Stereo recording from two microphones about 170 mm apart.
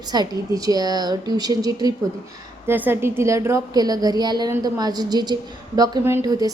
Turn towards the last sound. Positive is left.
turn(degrees=-20)  # may be behind; listen again after turning